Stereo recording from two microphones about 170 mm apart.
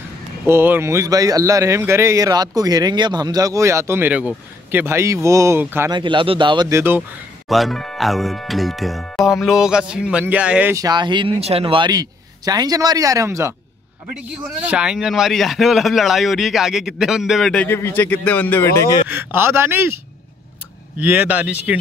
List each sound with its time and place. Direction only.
0.5 s speech: 15° right (ahead or behind)
5.9 s speech: 30° right (ahead or behind)
6.7 s speech: 15° right (ahead or behind)
7.4 s speech: centre (ahead or behind)
10.8 s speech: 25° right (ahead or behind); by 19.0 s 20° left (ahead or behind)
19.0 s speech: 10° right (ahead or behind)
21.0 s speech: 10° right (ahead or behind)